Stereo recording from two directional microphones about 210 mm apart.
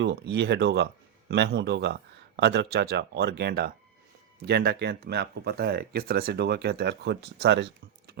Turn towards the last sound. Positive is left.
turn(degrees=-55)  # may be behind; listen again after turning